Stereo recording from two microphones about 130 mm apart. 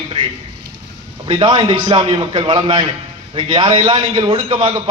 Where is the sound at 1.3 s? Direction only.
35° right (ahead or behind).